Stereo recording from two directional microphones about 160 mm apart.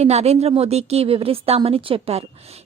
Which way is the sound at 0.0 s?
40° right (ahead or behind).